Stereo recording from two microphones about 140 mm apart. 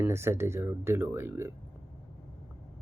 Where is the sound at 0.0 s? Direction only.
20° right (ahead or behind).